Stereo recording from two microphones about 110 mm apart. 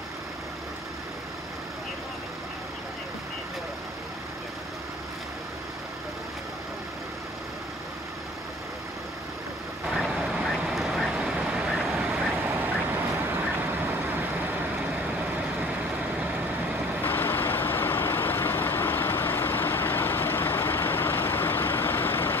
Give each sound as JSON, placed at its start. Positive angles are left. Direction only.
{"t": 9.9, "sound": "vehicle", "side_deg": -5}
{"t": 17.0, "sound": "vehicle", "side_deg": 20}